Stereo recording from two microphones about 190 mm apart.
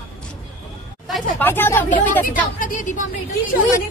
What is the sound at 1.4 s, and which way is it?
Speech, 10° left (ahead or behind).